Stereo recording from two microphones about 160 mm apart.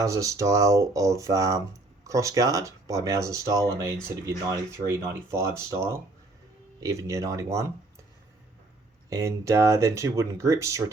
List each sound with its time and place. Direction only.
0.0 s speech: 20° right (ahead or behind)
9.0 s speech: 20° right (ahead or behind)